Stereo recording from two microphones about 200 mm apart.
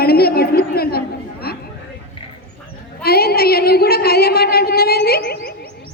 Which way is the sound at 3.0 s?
50° left (ahead or behind).